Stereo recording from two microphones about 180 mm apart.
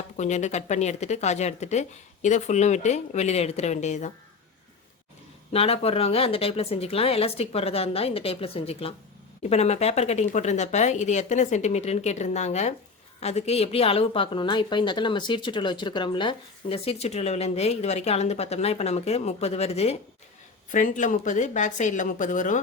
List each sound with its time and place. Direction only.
0.2 s a woman's voice: 40° left (ahead or behind)
5.5 s a woman's voice: 35° left (ahead or behind)